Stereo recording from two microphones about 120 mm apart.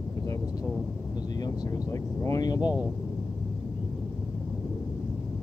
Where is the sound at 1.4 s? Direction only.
30° left (ahead or behind).